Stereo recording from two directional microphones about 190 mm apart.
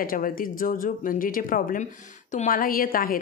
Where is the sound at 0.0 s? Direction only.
50° left (ahead or behind).